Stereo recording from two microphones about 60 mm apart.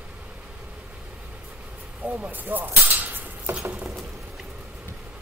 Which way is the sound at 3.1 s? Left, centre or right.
Right.